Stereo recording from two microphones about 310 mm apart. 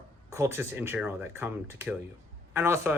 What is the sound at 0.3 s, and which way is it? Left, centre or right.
Speech, centre.